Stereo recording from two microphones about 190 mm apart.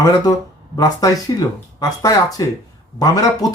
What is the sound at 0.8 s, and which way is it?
Speech, 20° left (ahead or behind).